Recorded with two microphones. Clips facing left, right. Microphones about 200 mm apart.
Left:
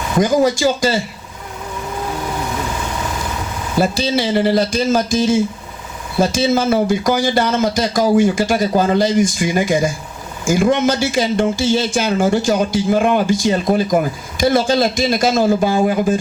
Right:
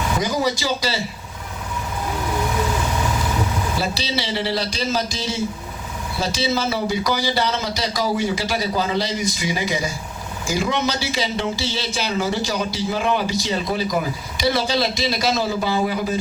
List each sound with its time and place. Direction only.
0.2 s speech: 50° left (ahead or behind)
3.8 s speech: 50° left (ahead or behind)